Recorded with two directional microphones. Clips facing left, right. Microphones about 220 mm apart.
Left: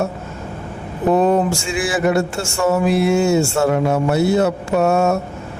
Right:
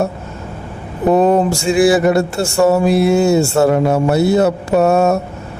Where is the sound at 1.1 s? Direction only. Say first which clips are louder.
Right 3 dB; 40° right (ahead or behind).